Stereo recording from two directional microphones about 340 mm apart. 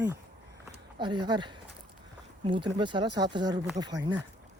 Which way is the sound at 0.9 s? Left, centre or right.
Centre.